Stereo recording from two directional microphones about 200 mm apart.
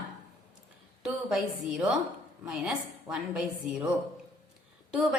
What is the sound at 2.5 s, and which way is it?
A woman's voice, 5° right (ahead or behind).